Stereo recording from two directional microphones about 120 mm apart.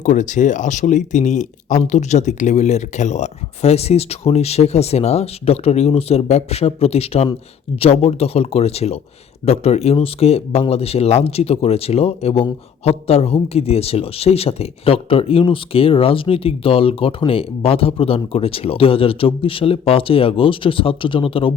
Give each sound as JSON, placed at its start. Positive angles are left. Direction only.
{"t": 0.0, "sound": "speech", "side_deg": 90}